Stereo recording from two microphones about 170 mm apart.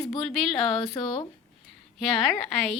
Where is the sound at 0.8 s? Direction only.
30° left (ahead or behind).